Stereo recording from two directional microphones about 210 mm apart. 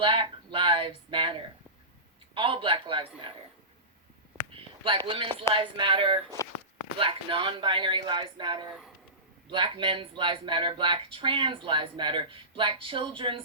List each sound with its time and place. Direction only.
0.0 s speech: 25° right (ahead or behind)
4.5 s speech: 25° right (ahead or behind)